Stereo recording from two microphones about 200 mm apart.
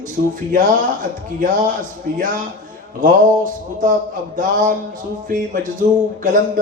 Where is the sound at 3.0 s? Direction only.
40° right (ahead or behind).